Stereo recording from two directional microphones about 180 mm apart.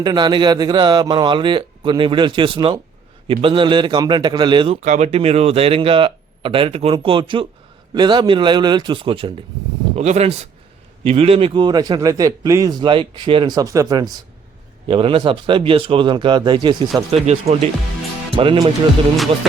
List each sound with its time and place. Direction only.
0.0 s a man's voice: 25° right (ahead or behind)
4.8 s a man's voice: 40° right (ahead or behind)
19.1 s music: centre (ahead or behind)